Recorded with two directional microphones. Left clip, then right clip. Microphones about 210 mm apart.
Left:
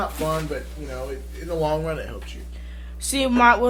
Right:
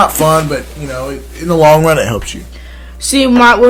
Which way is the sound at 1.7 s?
45° right (ahead or behind).